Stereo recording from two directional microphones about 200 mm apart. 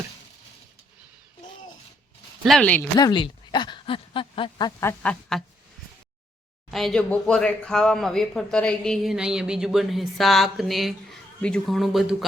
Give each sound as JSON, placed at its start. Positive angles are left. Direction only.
{"t": 2.4, "sound": "speech", "side_deg": 5}
{"t": 3.0, "sound": "speech", "side_deg": 25}
{"t": 6.7, "sound": "speech", "side_deg": 0}